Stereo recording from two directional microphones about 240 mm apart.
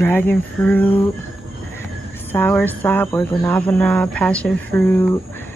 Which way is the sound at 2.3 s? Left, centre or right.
Centre.